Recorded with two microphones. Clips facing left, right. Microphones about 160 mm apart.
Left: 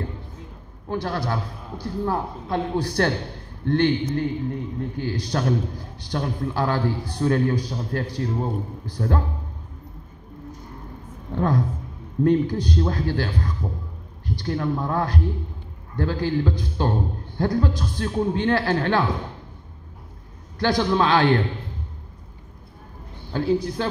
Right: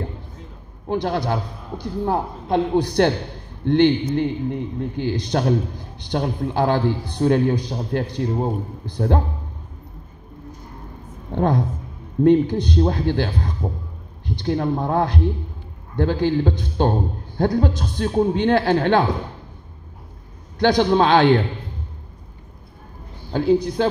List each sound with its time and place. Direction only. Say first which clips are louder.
0.8 s a man's voice: right 4 dB; 20° right (ahead or behind)
11.3 s a man's voice: right 3 dB; 25° right (ahead or behind)
20.5 s a man's voice: right 5 dB; 20° right (ahead or behind)
23.3 s a man's voice: right 4 dB; 20° right (ahead or behind)